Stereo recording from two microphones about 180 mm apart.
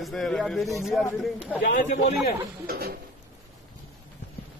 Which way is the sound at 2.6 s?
60° right (ahead or behind).